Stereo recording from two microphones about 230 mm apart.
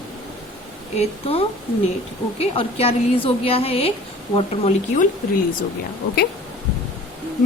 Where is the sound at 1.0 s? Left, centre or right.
Left.